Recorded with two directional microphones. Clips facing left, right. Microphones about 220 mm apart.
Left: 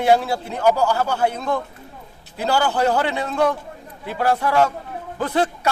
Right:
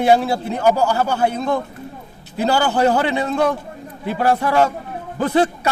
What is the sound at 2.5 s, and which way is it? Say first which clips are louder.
Speech: right 2 dB; 25° right (ahead or behind).